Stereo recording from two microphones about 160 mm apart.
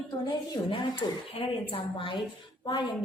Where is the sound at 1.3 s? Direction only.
35° left (ahead or behind).